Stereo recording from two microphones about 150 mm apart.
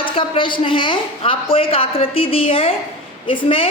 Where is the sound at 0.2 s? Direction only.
35° left (ahead or behind).